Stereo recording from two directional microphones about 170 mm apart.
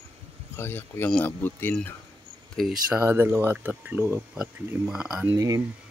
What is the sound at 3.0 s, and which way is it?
Speech, 15° right (ahead or behind).